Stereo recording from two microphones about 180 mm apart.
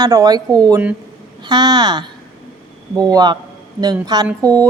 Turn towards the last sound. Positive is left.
turn(degrees=-20)  # may be behind; listen again after turning